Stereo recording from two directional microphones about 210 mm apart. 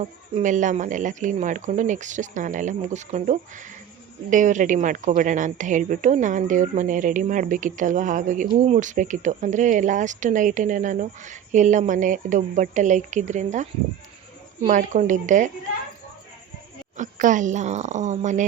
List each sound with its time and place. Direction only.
0.0 s a woman's voice: 35° right (ahead or behind)
17.0 s a woman's voice: 35° right (ahead or behind)